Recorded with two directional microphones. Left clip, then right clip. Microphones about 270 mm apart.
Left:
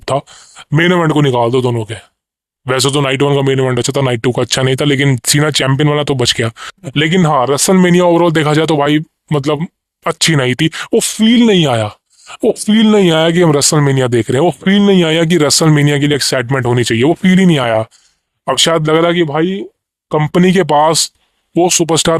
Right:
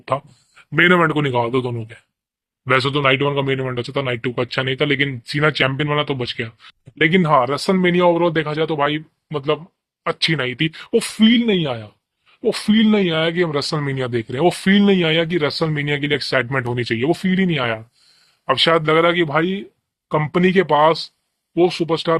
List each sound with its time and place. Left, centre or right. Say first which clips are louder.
0.0 s speech: left 6 dB; left